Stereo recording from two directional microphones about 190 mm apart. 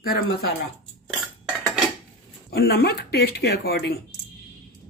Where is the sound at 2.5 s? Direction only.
55° left (ahead or behind).